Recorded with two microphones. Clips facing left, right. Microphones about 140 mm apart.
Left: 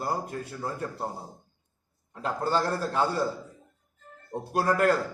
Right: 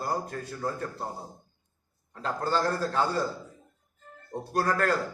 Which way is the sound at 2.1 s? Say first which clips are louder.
Left 1 dB; 25° left (ahead or behind).